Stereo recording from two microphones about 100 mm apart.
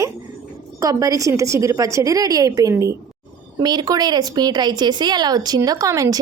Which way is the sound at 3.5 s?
45° right (ahead or behind).